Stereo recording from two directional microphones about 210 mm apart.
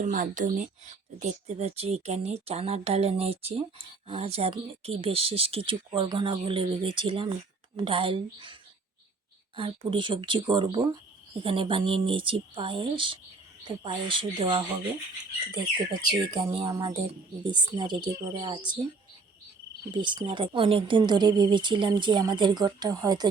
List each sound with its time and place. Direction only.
0.0 s speech: 40° right (ahead or behind)
9.6 s speech: 25° right (ahead or behind)
19.9 s speech: 20° right (ahead or behind)